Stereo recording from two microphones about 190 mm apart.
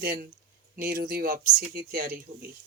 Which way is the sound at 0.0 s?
50° right (ahead or behind).